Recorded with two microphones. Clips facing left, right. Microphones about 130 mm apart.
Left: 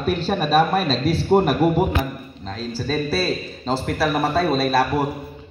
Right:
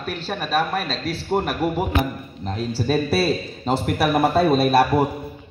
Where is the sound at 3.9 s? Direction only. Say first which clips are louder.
Right 3 dB; 20° right (ahead or behind).